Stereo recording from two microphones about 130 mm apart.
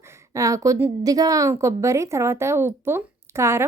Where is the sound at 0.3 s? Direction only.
25° right (ahead or behind).